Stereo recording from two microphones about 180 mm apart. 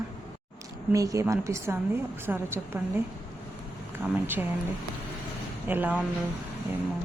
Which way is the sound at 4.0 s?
10° right (ahead or behind).